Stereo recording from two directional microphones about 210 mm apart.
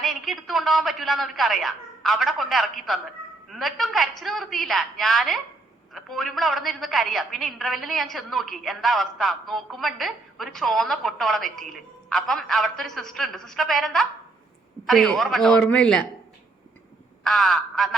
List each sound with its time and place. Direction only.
0.0 s a man's voice: centre (ahead or behind)
17.2 s speech: centre (ahead or behind)